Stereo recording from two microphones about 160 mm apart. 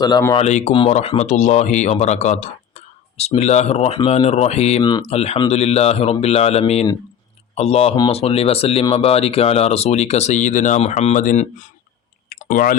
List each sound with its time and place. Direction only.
0.0 s speech: 20° left (ahead or behind)
0.3 s speech: 45° left (ahead or behind)
4.8 s speech: 25° left (ahead or behind)
5.0 s a man's voice: 40° left (ahead or behind)
12.3 s clicking: 55° left (ahead or behind)